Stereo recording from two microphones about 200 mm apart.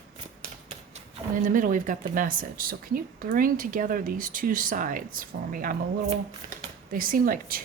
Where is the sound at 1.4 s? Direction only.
40° right (ahead or behind).